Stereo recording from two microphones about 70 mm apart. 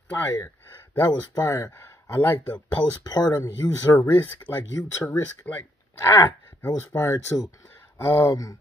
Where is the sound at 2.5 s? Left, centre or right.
Left.